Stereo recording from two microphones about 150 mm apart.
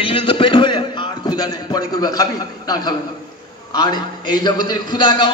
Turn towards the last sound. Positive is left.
turn(degrees=30)  # may be behind; listen again after turning